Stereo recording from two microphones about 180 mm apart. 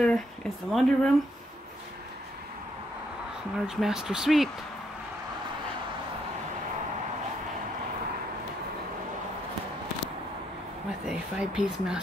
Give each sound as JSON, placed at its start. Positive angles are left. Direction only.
{"t": 0.0, "sound": "speech", "side_deg": 5}
{"t": 3.6, "sound": "speech", "side_deg": -5}
{"t": 11.1, "sound": "speech", "side_deg": -5}